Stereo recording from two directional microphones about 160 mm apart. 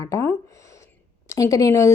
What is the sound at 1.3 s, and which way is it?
Speech, 20° left (ahead or behind).